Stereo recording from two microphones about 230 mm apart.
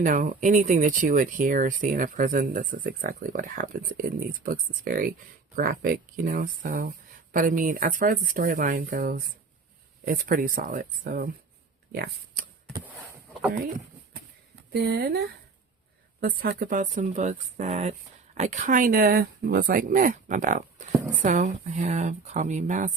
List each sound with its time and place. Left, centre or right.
0.0 s speech: right
13.6 s a sound: right
14.7 s speech: right
16.2 s speech: right